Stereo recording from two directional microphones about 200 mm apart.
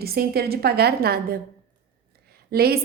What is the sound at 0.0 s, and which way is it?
A woman's voice, 50° right (ahead or behind).